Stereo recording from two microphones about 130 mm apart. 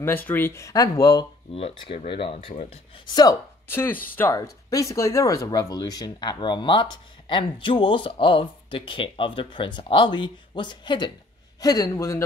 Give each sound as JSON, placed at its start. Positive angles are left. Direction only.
{"t": 0.0, "sound": "speech", "side_deg": 15}
{"t": 1.5, "sound": "speech", "side_deg": 45}
{"t": 3.6, "sound": "speech", "side_deg": 15}
{"t": 4.3, "sound": "speech", "side_deg": 25}